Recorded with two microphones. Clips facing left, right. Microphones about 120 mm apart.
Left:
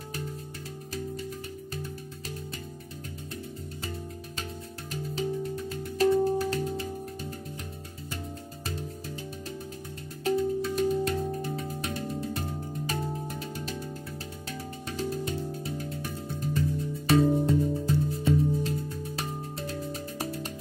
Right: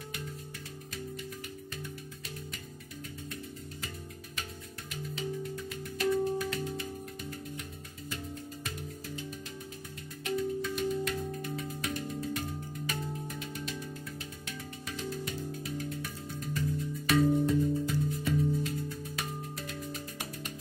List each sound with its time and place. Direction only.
5.1 s music: 35° left (ahead or behind)
10.2 s music: 35° left (ahead or behind)
14.9 s music: 30° left (ahead or behind)